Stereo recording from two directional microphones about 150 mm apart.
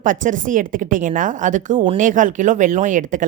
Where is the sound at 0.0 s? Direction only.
60° right (ahead or behind).